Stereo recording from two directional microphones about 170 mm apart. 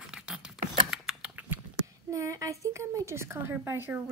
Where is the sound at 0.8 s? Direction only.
5° right (ahead or behind).